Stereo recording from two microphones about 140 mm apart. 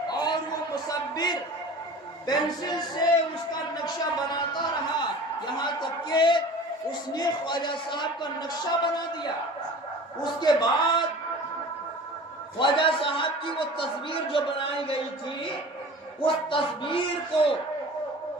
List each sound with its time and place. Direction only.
0.1 s a sound: 30° left (ahead or behind)
2.2 s a man's voice: 30° left (ahead or behind)
6.1 s a man's voice: 35° left (ahead or behind)
10.4 s a man's voice: 30° left (ahead or behind)
12.5 s a man's voice: 35° left (ahead or behind)
16.2 s a man's voice: 40° left (ahead or behind)